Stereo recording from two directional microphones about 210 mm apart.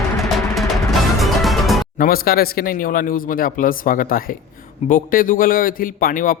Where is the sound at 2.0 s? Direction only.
45° left (ahead or behind).